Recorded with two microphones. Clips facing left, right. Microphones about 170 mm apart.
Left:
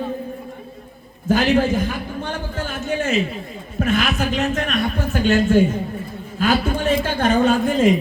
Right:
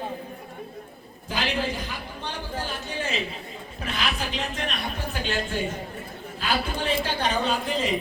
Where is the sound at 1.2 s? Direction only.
50° left (ahead or behind).